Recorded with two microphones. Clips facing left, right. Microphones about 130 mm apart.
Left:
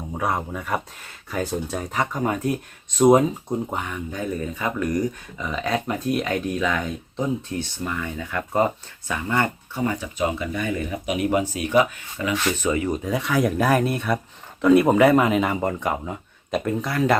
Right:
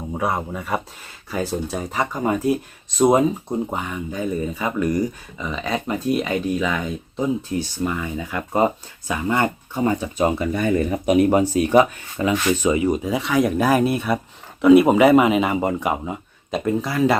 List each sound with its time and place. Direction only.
0.1 s speech: 5° right (ahead or behind)
9.8 s speech: 30° right (ahead or behind)
10.2 s speech: 40° right (ahead or behind)
12.3 s speech: 15° right (ahead or behind)